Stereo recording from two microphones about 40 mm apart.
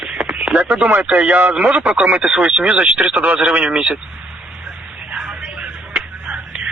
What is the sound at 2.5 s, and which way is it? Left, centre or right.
Speech, right.